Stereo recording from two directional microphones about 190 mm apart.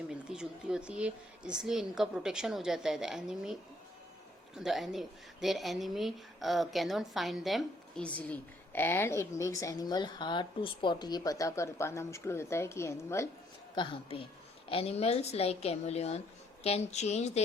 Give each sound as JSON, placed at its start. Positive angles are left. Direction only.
{"t": 0.1, "sound": "a woman's voice", "side_deg": -5}
{"t": 13.7, "sound": "a woman's voice", "side_deg": 25}